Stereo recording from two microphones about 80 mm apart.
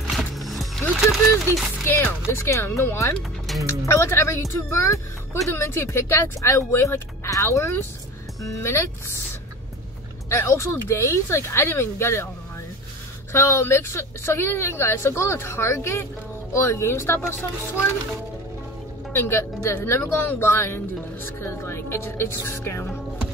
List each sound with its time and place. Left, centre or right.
0.1 s music: centre
1.9 s a woman's voice: left
3.2 s music: centre
3.6 s a woman's voice: left
10.3 s a woman's voice: left
13.3 s a woman's voice: left
19.1 s a woman's voice: left